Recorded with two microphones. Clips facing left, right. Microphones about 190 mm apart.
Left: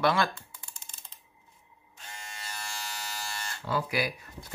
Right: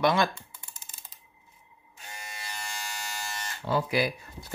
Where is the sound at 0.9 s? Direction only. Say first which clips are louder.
Right 1 dB; 5° right (ahead or behind).